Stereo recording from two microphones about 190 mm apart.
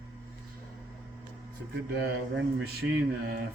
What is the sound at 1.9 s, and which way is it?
Speech, 55° right (ahead or behind).